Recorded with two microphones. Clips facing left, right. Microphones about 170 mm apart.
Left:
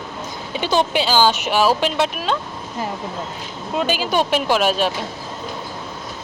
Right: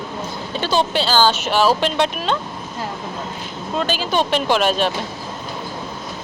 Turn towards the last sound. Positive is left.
turn(degrees=5)  # may be behind; listen again after turning